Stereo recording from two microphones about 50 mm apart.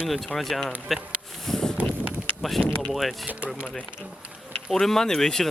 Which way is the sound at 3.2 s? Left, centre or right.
Right.